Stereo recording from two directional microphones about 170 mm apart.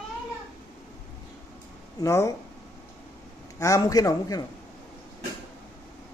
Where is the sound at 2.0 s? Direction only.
20° left (ahead or behind).